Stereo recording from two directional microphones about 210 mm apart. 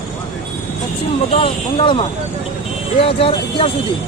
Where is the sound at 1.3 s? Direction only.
25° left (ahead or behind).